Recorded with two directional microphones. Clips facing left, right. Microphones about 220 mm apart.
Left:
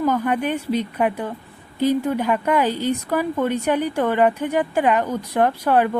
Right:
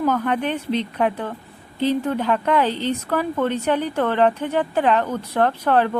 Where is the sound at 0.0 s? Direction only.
10° left (ahead or behind).